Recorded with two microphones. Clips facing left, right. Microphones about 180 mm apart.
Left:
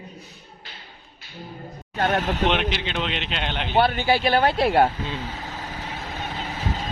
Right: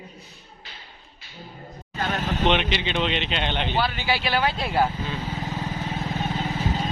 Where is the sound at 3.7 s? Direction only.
55° left (ahead or behind).